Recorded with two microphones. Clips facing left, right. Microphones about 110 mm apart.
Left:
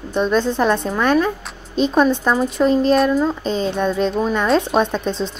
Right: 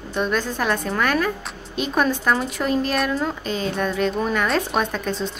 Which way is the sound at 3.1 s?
15° left (ahead or behind).